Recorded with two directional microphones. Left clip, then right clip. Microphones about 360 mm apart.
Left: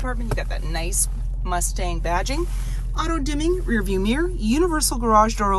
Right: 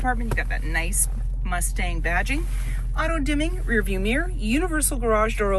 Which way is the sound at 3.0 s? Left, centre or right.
Centre.